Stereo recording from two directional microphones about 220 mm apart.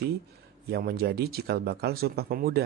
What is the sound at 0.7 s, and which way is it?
Speech, 45° right (ahead or behind).